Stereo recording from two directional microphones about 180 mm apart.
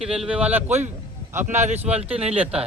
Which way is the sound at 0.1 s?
5° right (ahead or behind).